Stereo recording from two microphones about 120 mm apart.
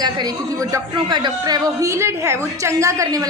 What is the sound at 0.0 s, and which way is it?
Speech, 35° right (ahead or behind).